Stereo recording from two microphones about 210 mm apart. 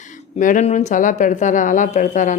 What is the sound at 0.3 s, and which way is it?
A woman's voice, 35° left (ahead or behind).